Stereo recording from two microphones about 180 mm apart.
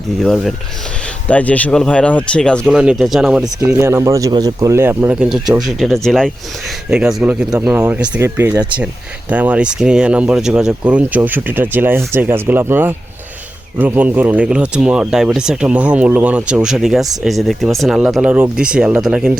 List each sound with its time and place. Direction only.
0.2 s speech: centre (ahead or behind)
3.6 s speech: 15° right (ahead or behind)